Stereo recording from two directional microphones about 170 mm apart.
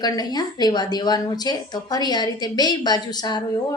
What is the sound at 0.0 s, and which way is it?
A woman's voice, 25° left (ahead or behind).